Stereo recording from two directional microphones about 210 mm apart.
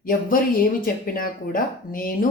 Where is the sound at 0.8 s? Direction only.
45° left (ahead or behind).